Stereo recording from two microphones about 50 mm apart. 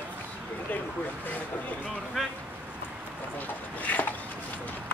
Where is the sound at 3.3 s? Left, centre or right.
Left.